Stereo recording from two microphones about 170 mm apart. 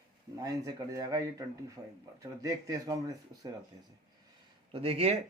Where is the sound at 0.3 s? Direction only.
20° right (ahead or behind).